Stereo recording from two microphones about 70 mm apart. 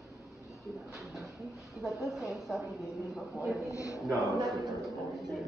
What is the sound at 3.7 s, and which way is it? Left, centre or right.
Speech, left.